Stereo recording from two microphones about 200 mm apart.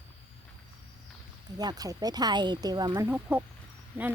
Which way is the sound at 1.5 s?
20° right (ahead or behind).